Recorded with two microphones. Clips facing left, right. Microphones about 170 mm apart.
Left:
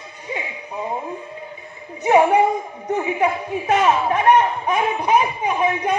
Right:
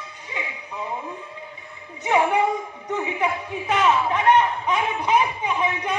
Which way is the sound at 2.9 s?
45° left (ahead or behind).